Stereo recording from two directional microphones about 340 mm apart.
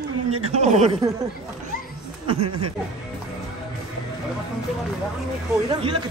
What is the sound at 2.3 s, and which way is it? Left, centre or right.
Speech, right.